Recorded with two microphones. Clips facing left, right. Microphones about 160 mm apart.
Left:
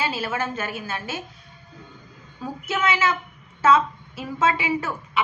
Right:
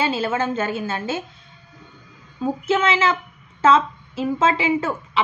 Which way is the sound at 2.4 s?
25° right (ahead or behind).